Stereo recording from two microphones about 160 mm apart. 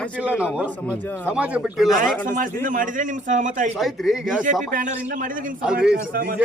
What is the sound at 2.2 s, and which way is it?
A man's voice, 55° right (ahead or behind).